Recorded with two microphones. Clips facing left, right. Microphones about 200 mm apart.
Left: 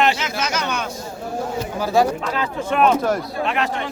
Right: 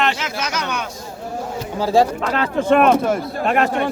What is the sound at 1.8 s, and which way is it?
Speech, 30° right (ahead or behind).